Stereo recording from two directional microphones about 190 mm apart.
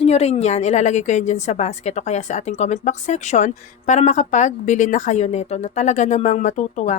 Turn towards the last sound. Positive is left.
turn(degrees=40)  # may be behind; listen again after turning